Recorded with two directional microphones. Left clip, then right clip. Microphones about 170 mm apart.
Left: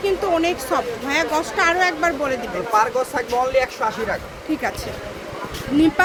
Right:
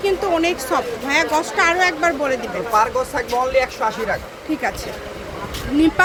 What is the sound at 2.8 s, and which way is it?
Speech, 25° left (ahead or behind).